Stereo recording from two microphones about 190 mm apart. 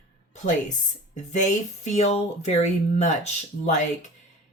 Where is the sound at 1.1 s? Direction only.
40° left (ahead or behind).